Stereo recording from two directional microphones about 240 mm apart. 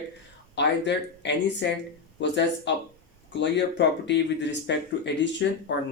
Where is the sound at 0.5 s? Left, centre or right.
Left.